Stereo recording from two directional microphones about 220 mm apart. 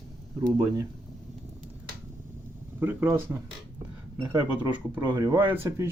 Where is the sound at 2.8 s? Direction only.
10° right (ahead or behind).